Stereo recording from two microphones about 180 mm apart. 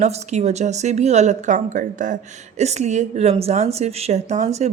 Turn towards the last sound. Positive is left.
turn(degrees=-40)  # may be behind; listen again after turning